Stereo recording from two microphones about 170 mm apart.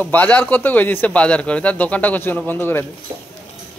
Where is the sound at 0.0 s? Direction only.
10° left (ahead or behind).